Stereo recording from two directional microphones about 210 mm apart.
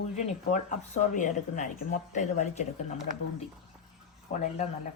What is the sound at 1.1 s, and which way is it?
Speech, 35° left (ahead or behind).